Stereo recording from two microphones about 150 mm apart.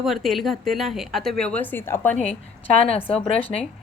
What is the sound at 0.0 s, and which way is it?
Speech, centre (ahead or behind).